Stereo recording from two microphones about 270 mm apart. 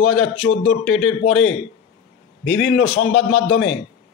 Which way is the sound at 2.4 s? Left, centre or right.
Left.